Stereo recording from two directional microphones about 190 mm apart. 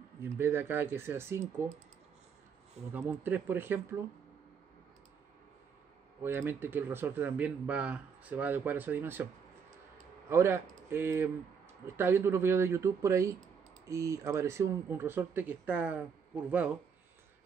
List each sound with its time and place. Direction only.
0.2 s speech: 10° right (ahead or behind)
2.9 s speech: 10° right (ahead or behind)
6.2 s speech: 10° right (ahead or behind)
10.3 s speech: 15° right (ahead or behind)